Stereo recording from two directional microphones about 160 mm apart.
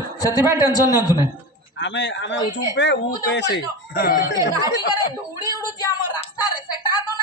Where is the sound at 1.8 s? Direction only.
90° left; by 4.2 s 70° left (ahead or behind).